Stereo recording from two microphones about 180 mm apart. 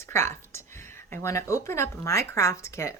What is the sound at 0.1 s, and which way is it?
Speech, 15° left (ahead or behind).